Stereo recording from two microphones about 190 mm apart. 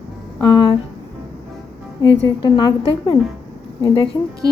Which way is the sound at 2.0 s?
25° left (ahead or behind).